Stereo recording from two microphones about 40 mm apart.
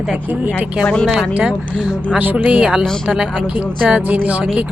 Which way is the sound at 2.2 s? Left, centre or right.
Right.